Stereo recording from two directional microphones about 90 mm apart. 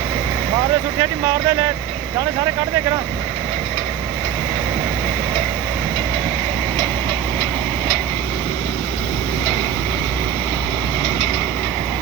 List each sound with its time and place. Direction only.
0.9 s speech: 25° right (ahead or behind)